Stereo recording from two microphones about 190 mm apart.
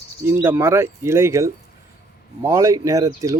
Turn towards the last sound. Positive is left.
turn(degrees=-20)  # may be behind; listen again after turning